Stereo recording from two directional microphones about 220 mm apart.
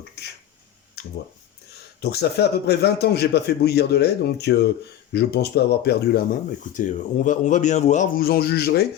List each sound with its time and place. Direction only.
0.2 s a sound: 50° left (ahead or behind)
2.0 s a man's voice: 45° left (ahead or behind)
6.7 s speech: 35° left (ahead or behind)